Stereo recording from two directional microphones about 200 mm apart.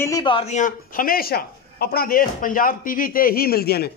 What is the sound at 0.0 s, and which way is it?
A man's voice, 20° left (ahead or behind).